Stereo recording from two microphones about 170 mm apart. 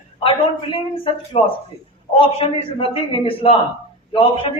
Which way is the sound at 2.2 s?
30° left (ahead or behind).